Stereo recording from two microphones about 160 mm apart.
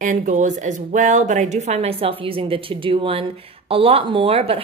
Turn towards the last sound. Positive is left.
turn(degrees=-35)  # may be behind; listen again after turning